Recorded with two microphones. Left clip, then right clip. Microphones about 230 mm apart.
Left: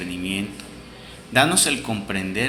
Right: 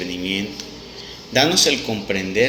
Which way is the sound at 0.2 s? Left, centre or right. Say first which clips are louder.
Right 3 dB; left.